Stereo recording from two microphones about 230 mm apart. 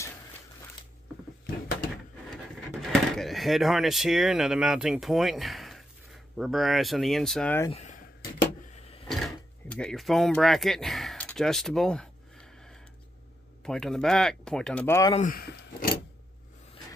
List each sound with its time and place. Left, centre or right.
2.7 s speech: centre
7.7 s a sound: left
9.0 s speech: centre
13.6 s speech: centre
15.1 s speech: left